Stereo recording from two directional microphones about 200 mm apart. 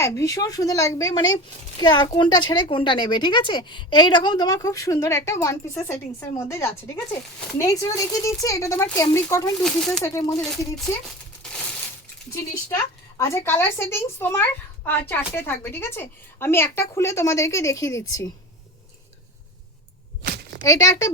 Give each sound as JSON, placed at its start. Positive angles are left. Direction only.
{"t": 0.0, "sound": "a woman's voice", "side_deg": 15}
{"t": 9.6, "sound": "speech", "side_deg": 5}
{"t": 10.0, "sound": "a woman's voice", "side_deg": 15}
{"t": 12.3, "sound": "a woman's voice", "side_deg": 15}
{"t": 20.2, "sound": "a sound", "side_deg": -55}
{"t": 20.7, "sound": "a woman's voice", "side_deg": 15}